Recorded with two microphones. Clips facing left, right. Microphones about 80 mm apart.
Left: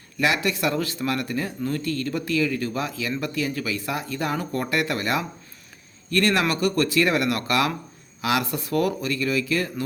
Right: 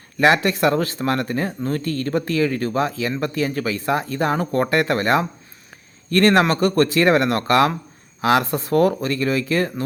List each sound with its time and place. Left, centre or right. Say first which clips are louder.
0.2 s speech: right 7 dB; right